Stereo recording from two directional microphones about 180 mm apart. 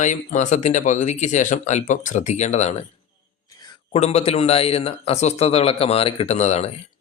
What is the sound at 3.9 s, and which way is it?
Speech, 35° left (ahead or behind).